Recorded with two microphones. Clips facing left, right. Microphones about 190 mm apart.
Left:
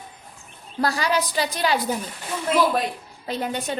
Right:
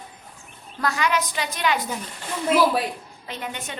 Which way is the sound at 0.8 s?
35° left (ahead or behind).